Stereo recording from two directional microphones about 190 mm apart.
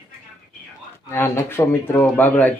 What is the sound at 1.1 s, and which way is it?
Speech, 10° left (ahead or behind).